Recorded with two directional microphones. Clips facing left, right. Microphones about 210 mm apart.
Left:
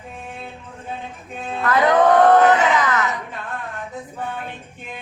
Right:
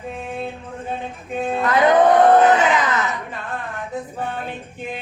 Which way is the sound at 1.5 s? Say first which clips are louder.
Right 1 dB; 15° right (ahead or behind).